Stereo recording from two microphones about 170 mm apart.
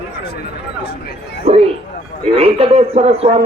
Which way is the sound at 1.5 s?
35° right (ahead or behind).